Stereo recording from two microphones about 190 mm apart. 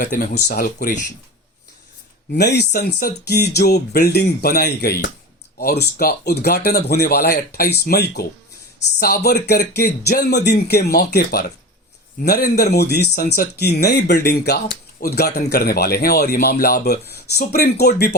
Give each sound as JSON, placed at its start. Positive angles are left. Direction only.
{"t": 0.4, "sound": "speech", "side_deg": 50}
{"t": 2.3, "sound": "speech", "side_deg": 60}